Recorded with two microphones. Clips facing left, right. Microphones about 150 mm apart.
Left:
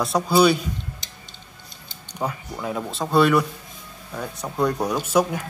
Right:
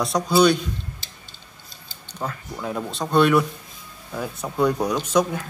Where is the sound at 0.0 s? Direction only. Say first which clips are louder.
Even; 5° left (ahead or behind).